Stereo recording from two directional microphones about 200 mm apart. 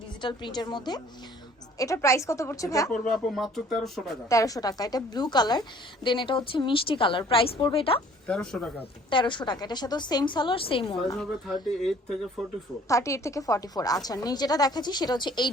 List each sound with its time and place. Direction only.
0.2 s a woman's voice: 25° left (ahead or behind)
3.0 s speech: centre (ahead or behind)
4.3 s a woman's voice: 15° left (ahead or behind)
8.3 s speech: 5° left (ahead or behind)
9.0 s a woman's voice: 25° left (ahead or behind)
11.2 s speech: centre (ahead or behind)
12.9 s a woman's voice: 15° left (ahead or behind)